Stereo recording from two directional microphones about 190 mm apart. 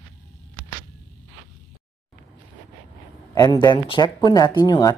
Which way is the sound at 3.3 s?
20° left (ahead or behind).